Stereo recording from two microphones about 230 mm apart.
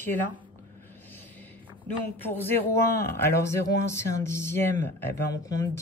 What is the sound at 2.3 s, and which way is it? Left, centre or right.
Speech, centre.